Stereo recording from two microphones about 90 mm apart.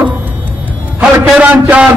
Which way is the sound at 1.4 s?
15° right (ahead or behind).